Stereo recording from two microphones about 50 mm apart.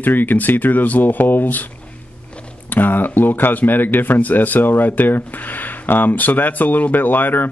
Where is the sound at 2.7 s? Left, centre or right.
Left.